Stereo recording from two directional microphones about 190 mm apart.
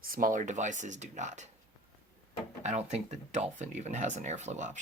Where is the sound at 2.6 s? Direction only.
35° right (ahead or behind).